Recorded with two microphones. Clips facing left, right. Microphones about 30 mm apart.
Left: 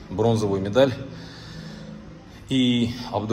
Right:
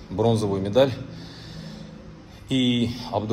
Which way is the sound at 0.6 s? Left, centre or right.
Centre.